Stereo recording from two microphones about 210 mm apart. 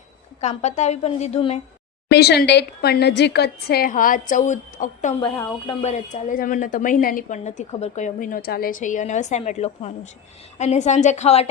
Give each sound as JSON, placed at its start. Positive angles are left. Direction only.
{"t": 0.4, "sound": "a woman's voice", "side_deg": 35}
{"t": 2.0, "sound": "a woman's voice", "side_deg": 50}